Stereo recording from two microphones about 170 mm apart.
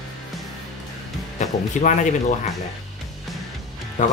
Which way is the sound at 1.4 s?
45° left (ahead or behind).